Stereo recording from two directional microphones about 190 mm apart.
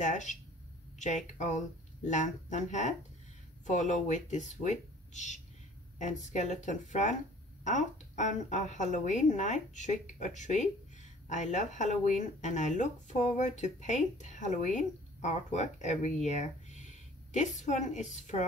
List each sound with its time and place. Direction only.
0.0 s speech: 40° left (ahead or behind)